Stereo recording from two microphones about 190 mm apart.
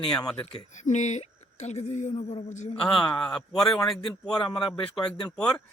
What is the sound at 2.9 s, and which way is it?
Speech, 5° left (ahead or behind).